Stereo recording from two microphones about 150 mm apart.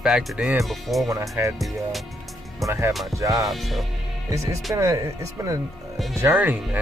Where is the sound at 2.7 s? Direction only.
20° right (ahead or behind).